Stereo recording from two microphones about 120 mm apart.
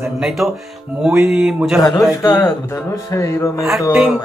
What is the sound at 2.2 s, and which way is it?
Speech, 30° left (ahead or behind).